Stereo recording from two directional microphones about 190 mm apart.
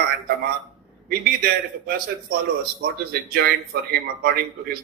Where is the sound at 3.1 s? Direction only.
55° right (ahead or behind).